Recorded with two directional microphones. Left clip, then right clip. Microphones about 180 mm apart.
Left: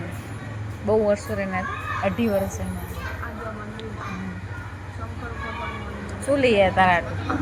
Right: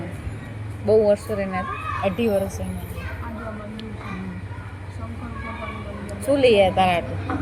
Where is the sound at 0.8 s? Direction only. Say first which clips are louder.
Right 4 dB; centre (ahead or behind).